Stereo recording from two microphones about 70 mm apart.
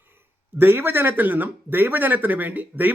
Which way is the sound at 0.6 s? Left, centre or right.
Right.